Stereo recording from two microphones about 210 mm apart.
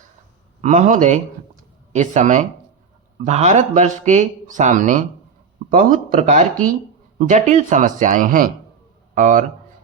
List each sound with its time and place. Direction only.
0.6 s speech: 35° right (ahead or behind)